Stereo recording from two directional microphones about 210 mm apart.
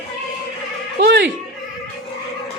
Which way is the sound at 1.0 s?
50° right (ahead or behind).